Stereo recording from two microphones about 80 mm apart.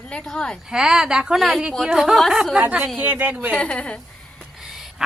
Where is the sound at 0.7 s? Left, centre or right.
Centre.